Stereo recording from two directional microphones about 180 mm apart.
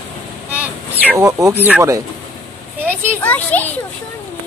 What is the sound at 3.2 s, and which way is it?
Speech, 10° left (ahead or behind).